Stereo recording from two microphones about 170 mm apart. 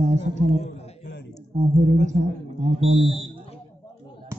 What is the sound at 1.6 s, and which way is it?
Speech, 40° right (ahead or behind).